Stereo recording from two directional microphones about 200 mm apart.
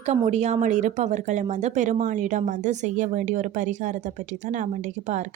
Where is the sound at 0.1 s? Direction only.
35° right (ahead or behind).